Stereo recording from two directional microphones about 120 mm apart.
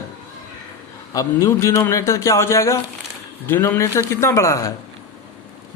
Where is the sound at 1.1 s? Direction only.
30° left (ahead or behind).